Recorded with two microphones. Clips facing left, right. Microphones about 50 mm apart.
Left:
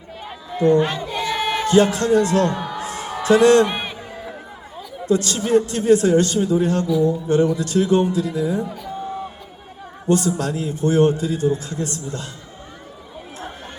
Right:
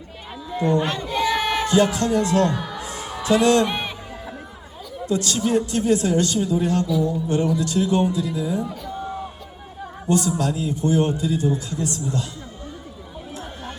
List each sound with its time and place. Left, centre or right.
0.9 s a sound: centre
1.6 s a man's voice: left
2.7 s music: left
3.2 s a man's voice: left
3.7 s a sound: centre
5.0 s a man's voice: left
10.1 s a man's voice: left